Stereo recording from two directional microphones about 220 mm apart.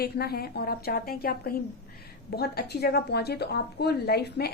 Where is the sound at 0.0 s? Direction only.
45° left (ahead or behind).